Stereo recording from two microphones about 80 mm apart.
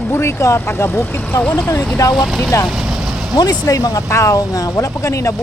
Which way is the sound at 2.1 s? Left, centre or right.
Centre.